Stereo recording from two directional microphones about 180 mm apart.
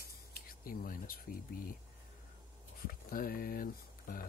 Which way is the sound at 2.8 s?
55° left (ahead or behind).